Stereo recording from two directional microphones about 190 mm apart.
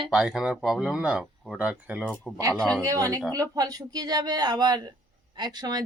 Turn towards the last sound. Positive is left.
turn(degrees=-20)  # may be behind; listen again after turning